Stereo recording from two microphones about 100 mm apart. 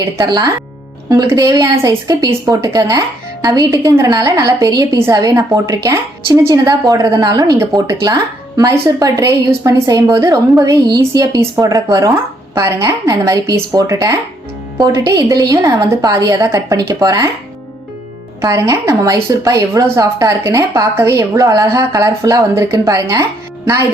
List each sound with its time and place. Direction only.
0.0 s speech: 45° right (ahead or behind)
1.3 s speech: 35° right (ahead or behind)
18.4 s speech: 30° right (ahead or behind)